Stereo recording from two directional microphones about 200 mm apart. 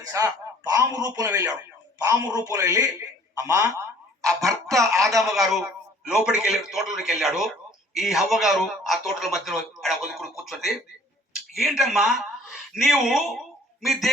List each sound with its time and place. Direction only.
0.1 s a man's voice: 15° right (ahead or behind)
3.3 s a sound: 15° right (ahead or behind)
4.4 s a man's voice: 15° right (ahead or behind)
5.3 s a man's voice: centre (ahead or behind)